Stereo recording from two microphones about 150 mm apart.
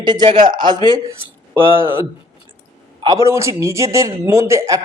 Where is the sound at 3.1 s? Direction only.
20° right (ahead or behind).